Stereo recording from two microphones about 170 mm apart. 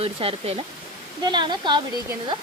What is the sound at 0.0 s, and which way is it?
Speech, 35° right (ahead or behind).